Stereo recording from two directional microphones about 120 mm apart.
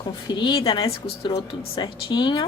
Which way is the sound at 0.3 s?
40° left (ahead or behind).